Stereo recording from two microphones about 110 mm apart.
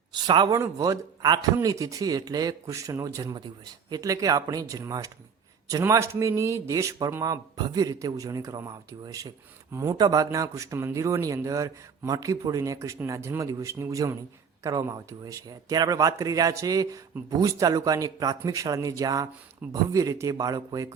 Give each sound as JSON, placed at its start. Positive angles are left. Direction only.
{"t": 0.1, "sound": "speech", "side_deg": -40}
{"t": 0.5, "sound": "a man's voice", "side_deg": -30}